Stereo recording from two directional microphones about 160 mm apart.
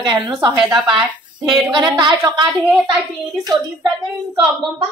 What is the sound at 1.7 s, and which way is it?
Speech, 30° right (ahead or behind).